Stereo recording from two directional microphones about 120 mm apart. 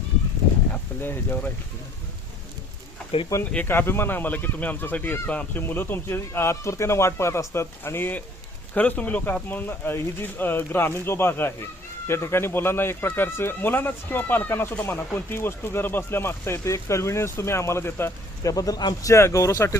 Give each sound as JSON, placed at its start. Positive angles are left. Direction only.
{"t": 0.7, "sound": "speech", "side_deg": 15}
{"t": 3.5, "sound": "speech", "side_deg": 15}